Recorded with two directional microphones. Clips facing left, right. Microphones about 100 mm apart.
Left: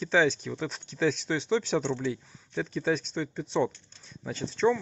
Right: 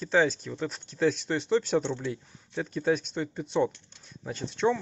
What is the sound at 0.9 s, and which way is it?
Speech, 45° right (ahead or behind).